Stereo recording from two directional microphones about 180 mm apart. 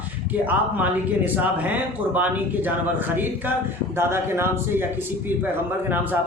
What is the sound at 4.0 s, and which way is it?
Speech, 15° right (ahead or behind).